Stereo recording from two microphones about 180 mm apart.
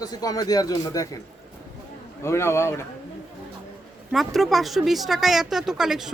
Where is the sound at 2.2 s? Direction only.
15° left (ahead or behind).